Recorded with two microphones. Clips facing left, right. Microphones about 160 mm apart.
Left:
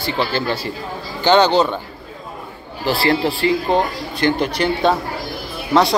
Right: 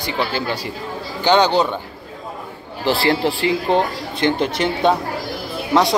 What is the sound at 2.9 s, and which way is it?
Speech, 20° right (ahead or behind).